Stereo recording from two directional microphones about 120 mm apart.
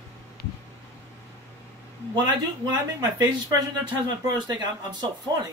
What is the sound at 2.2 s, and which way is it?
Speech, 35° right (ahead or behind).